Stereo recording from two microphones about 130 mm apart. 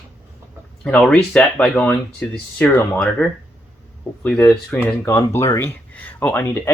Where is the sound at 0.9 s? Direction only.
5° left (ahead or behind).